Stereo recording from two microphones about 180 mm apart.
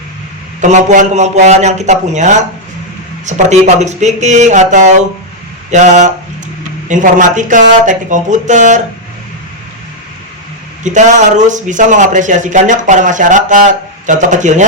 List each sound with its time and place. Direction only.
0.6 s a man's voice: 40° right (ahead or behind)
10.8 s speech: 40° right (ahead or behind)